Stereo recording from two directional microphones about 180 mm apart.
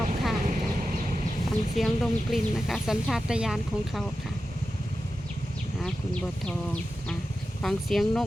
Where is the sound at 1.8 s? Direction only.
Centre (ahead or behind).